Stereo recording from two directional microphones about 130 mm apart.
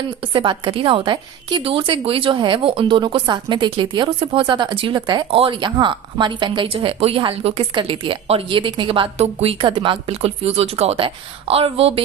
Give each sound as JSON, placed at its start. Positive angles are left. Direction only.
{"t": 0.2, "sound": "a woman's voice", "side_deg": -40}